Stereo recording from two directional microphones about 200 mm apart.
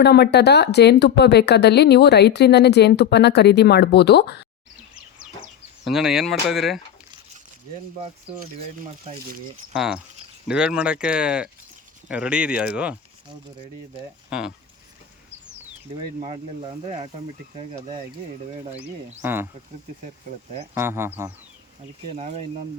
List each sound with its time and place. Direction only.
0.0 s speech: 55° left (ahead or behind)
5.8 s speech: centre (ahead or behind)
9.7 s speech: 5° right (ahead or behind)
14.3 s speech: 5° right (ahead or behind)
16.2 s speech: 30° right (ahead or behind)
19.2 s speech: 10° right (ahead or behind)
20.7 s speech: 10° right (ahead or behind)
22.1 s speech: 35° right (ahead or behind)